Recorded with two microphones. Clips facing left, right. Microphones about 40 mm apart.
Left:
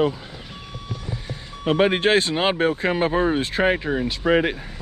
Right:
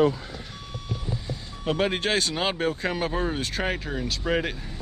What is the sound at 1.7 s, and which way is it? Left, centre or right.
Speech, left.